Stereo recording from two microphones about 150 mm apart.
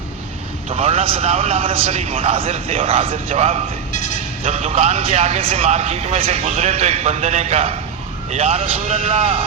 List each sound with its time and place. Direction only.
0.7 s a man's voice: 40° right (ahead or behind)